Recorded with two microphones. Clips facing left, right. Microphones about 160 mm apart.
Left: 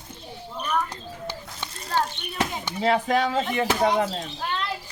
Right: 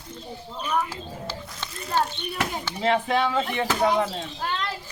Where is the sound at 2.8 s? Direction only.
40° left (ahead or behind).